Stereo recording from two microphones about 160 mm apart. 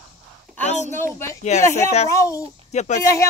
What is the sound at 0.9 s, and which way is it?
A man's voice, 15° left (ahead or behind).